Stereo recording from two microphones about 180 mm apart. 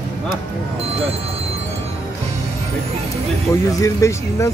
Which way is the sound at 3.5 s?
20° left (ahead or behind).